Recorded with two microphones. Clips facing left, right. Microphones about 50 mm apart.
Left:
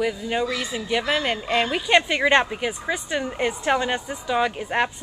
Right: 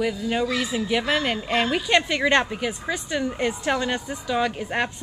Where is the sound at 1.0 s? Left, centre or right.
Centre.